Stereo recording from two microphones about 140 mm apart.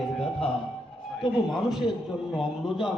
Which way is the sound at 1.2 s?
Centre (ahead or behind).